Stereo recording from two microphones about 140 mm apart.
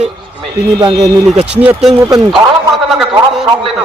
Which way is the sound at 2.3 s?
Centre (ahead or behind).